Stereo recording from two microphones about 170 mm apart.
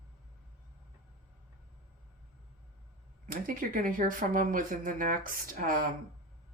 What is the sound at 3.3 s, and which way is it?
Speech, 55° right (ahead or behind).